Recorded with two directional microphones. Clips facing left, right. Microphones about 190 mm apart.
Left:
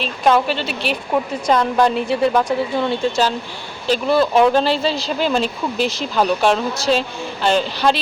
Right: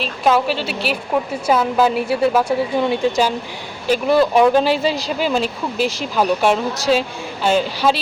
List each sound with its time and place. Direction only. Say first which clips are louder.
0.0 s a woman's voice: left 1 dB; 5° right (ahead or behind)